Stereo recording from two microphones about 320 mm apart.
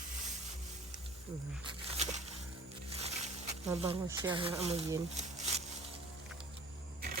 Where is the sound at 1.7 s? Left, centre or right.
Centre.